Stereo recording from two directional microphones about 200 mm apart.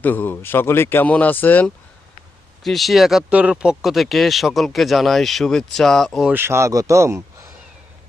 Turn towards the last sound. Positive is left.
turn(degrees=-15)  # may be behind; listen again after turning